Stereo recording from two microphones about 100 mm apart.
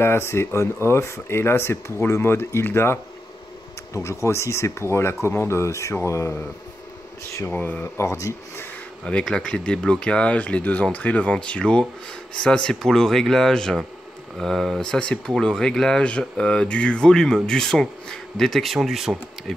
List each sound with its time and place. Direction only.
0.0 s speech: 25° left (ahead or behind)
8.0 s speech: 30° left (ahead or behind)
9.0 s speech: 10° left (ahead or behind)